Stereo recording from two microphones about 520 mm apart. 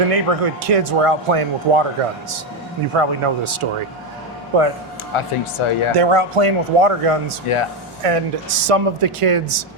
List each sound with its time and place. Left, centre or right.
0.1 s speech: right
2.9 s speech: right
5.1 s speech: left
6.0 s speech: right
7.5 s speech: left
8.0 s speech: right